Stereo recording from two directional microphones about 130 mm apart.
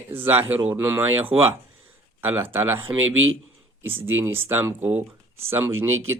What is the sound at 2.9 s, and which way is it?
Speech, 25° right (ahead or behind).